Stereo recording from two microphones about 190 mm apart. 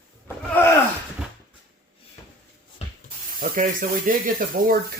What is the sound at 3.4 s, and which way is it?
Speech, 45° right (ahead or behind).